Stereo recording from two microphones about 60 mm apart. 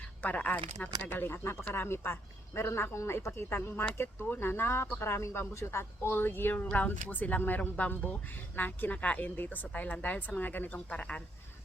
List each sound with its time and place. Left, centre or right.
0.2 s speech: left
1.0 s speech: left